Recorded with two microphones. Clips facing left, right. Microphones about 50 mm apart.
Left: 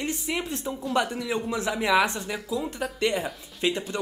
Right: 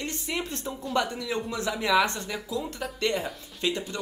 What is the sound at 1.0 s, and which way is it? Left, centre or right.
A man's voice, centre.